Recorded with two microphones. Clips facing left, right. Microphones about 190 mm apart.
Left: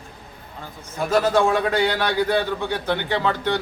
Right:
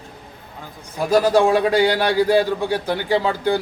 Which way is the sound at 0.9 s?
10° right (ahead or behind).